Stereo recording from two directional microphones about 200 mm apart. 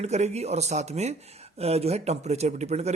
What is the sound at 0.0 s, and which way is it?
Speech, 35° right (ahead or behind).